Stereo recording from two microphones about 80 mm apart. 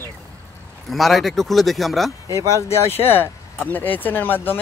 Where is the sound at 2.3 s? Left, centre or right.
Left.